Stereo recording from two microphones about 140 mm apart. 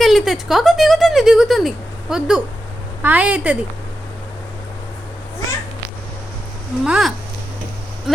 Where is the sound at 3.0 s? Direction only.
10° right (ahead or behind).